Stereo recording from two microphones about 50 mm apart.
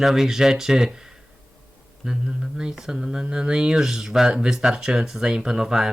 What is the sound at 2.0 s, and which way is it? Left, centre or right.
Speech, centre.